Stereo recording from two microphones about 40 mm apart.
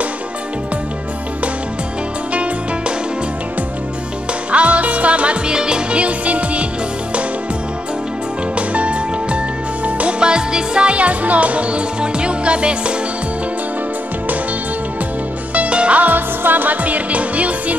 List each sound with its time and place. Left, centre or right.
4.5 s music: right
5.5 s music: right
8.5 s music: right
10.2 s music: right
15.5 s music: right
16.0 s music: right